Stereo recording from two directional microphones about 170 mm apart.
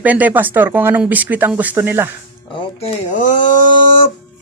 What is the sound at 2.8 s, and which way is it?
Speech, 45° left (ahead or behind).